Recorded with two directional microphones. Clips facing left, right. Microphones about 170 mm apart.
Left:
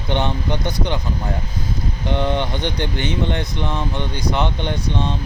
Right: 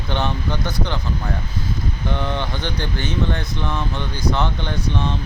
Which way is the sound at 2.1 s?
20° left (ahead or behind).